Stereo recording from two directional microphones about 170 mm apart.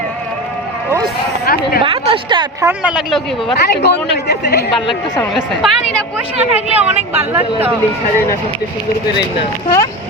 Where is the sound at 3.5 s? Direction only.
70° left (ahead or behind).